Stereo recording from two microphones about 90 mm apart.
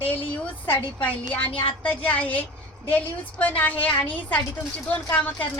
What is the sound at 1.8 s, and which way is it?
A woman's voice, 15° left (ahead or behind).